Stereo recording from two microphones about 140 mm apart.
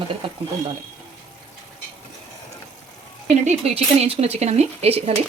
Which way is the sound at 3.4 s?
45° right (ahead or behind).